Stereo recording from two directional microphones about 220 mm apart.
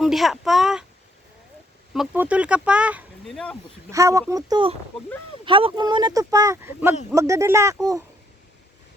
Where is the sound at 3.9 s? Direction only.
15° right (ahead or behind).